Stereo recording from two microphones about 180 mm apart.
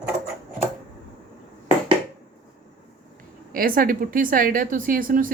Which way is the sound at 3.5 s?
50° right (ahead or behind).